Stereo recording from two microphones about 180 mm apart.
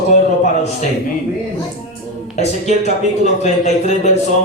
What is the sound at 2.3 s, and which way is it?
Speech, 40° left (ahead or behind).